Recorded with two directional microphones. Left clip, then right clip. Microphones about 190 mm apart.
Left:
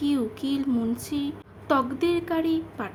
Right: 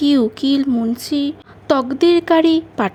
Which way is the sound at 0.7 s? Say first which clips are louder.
Right 8 dB; 20° right (ahead or behind).